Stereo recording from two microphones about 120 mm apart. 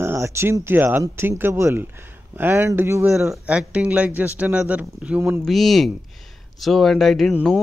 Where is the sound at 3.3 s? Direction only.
10° right (ahead or behind).